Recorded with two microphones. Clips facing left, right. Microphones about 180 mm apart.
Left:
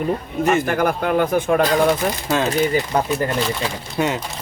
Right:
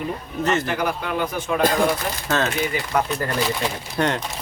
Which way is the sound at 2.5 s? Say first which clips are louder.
Left 5 dB; 35° left (ahead or behind).